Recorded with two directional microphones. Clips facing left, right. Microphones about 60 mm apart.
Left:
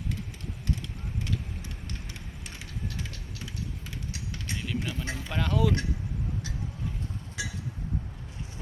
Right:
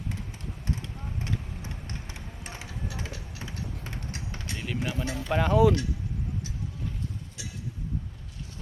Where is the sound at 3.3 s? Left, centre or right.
Right.